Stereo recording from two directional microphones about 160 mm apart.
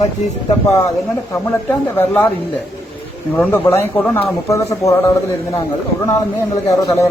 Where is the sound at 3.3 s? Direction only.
10° left (ahead or behind).